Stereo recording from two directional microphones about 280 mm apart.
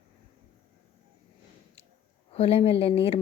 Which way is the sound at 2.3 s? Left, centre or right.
Left.